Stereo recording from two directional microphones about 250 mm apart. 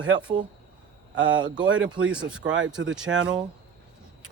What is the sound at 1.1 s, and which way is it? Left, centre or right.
Speech, centre.